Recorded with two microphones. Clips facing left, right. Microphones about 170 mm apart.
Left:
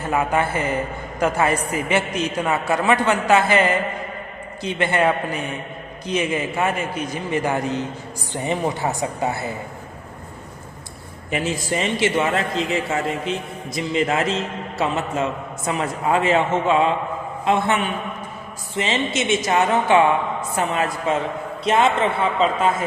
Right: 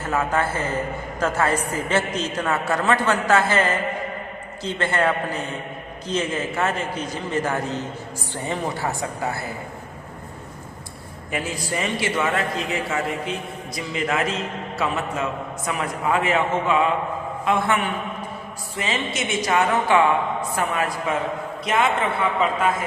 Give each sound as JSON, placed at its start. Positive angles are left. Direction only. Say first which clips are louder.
{"t": 0.1, "sound": "a man's voice", "louder": "left 2 dB", "side_deg": 15}
{"t": 11.3, "sound": "a man's voice", "louder": "left 4 dB", "side_deg": 20}